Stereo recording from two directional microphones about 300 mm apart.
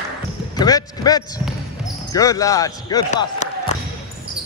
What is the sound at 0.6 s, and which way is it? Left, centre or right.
A man's voice, centre.